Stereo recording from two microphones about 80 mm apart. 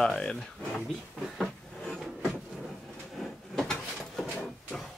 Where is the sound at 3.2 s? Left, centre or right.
Centre.